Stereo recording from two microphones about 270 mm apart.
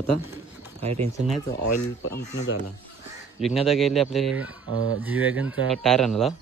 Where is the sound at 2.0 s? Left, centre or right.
Left.